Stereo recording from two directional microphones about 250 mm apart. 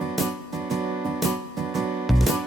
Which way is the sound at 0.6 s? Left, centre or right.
Centre.